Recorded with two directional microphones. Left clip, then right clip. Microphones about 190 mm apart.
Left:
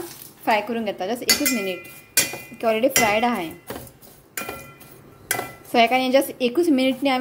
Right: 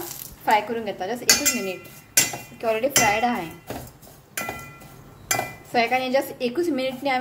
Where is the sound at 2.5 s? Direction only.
30° left (ahead or behind).